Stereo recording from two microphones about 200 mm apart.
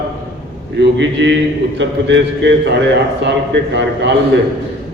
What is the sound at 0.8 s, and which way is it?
A man's voice, 60° right (ahead or behind).